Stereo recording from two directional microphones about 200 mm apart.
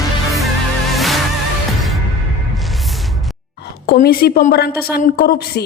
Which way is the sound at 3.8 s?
50° left (ahead or behind).